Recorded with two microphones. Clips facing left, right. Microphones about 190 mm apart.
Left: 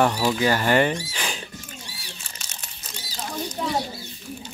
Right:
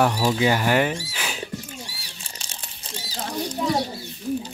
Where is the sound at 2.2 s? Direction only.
30° right (ahead or behind).